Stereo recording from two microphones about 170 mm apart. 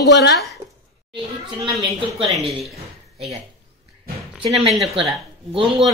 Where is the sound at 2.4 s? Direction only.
Centre (ahead or behind).